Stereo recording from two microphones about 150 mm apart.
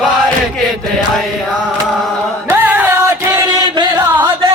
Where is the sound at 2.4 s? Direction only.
10° right (ahead or behind).